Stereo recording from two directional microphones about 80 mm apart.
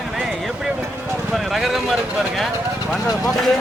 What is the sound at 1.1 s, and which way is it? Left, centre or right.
Speech, centre.